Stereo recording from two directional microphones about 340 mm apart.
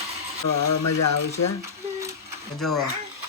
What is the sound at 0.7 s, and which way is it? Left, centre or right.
Speech, left.